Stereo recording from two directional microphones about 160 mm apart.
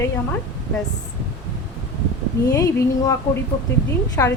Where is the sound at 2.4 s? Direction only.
20° left (ahead or behind).